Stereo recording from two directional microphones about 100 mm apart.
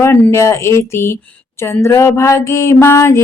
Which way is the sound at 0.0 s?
25° left (ahead or behind).